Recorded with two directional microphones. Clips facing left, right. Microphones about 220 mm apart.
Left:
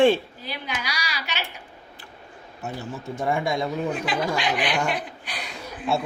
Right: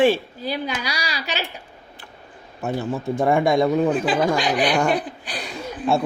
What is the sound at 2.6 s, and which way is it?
Speech, 90° right.